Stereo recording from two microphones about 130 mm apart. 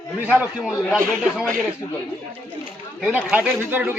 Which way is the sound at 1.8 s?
30° left (ahead or behind).